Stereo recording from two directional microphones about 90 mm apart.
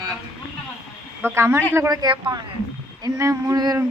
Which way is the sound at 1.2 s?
30° right (ahead or behind).